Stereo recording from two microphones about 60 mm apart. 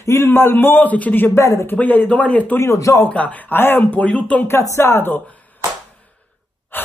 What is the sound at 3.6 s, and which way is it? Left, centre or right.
Speech, left.